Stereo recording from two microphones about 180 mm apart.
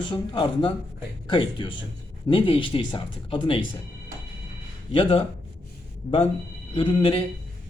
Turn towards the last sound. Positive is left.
turn(degrees=30)  # may be behind; listen again after turning